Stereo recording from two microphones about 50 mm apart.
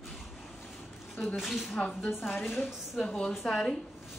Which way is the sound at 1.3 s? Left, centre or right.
Centre.